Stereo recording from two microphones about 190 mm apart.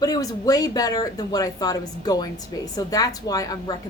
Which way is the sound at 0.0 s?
20° left (ahead or behind).